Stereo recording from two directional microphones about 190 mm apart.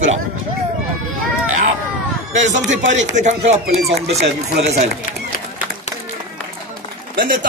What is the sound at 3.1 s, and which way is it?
Speech, 40° right (ahead or behind).